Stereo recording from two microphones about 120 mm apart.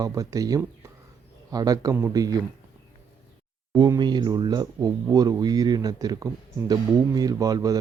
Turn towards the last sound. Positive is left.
turn(degrees=-30)  # may be behind; listen again after turning